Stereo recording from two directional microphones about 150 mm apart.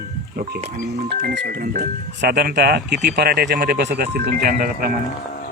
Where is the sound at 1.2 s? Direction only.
70° right (ahead or behind).